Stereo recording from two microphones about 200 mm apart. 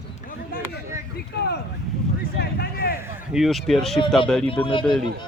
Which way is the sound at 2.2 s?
50° left (ahead or behind).